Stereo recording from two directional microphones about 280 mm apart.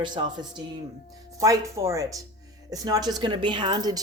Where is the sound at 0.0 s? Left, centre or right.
Centre.